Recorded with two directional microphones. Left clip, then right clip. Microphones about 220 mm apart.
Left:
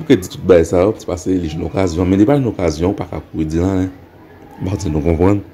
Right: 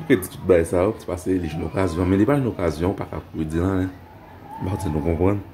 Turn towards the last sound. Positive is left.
turn(degrees=25)  # may be behind; listen again after turning